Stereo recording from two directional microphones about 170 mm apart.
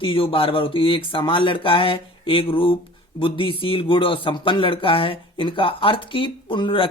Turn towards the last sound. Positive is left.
turn(degrees=30)  # may be behind; listen again after turning